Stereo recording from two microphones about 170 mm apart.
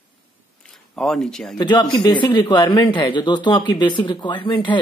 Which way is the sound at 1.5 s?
25° left (ahead or behind).